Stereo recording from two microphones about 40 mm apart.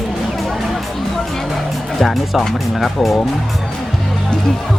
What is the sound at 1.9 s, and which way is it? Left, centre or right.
Speech, centre.